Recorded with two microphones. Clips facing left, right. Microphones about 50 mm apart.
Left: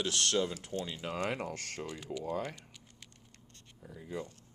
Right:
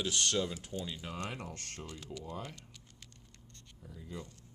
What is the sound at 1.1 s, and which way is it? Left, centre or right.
Speech, left.